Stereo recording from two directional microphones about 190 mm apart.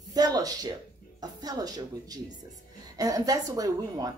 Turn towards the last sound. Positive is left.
turn(degrees=-20)  # may be behind; listen again after turning